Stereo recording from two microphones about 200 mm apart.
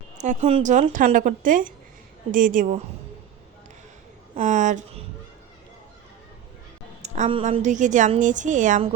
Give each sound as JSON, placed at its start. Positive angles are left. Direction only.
{"t": 0.2, "sound": "a woman's voice", "side_deg": -35}
{"t": 4.4, "sound": "speech", "side_deg": -40}
{"t": 7.0, "sound": "a woman's voice", "side_deg": -30}